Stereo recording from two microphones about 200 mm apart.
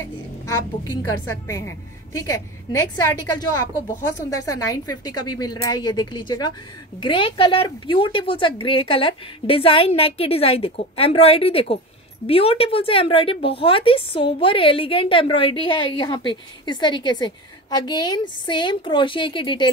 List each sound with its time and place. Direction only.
0.0 s a woman's voice: 15° left (ahead or behind)